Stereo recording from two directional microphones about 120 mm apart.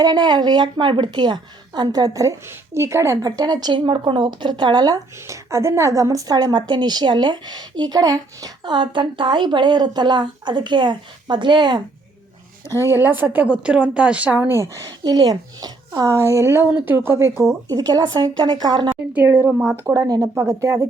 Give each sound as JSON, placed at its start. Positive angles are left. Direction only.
{"t": 0.0, "sound": "a woman's voice", "side_deg": -35}
{"t": 5.2, "sound": "a woman's voice", "side_deg": -25}
{"t": 12.6, "sound": "a woman's voice", "side_deg": 25}
{"t": 12.9, "sound": "a woman's voice", "side_deg": -15}
{"t": 14.8, "sound": "a woman's voice", "side_deg": -35}
{"t": 17.7, "sound": "a woman's voice", "side_deg": -30}
{"t": 19.1, "sound": "a woman's voice", "side_deg": -15}
{"t": 19.8, "sound": "a woman's voice", "side_deg": -30}